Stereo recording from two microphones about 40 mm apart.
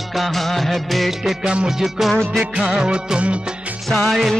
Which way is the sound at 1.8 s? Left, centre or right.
Centre.